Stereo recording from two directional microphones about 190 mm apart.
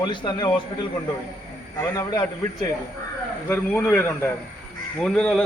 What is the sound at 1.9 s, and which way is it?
Speech, 20° left (ahead or behind).